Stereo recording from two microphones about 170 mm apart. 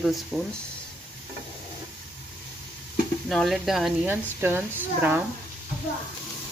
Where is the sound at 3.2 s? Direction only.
Centre (ahead or behind).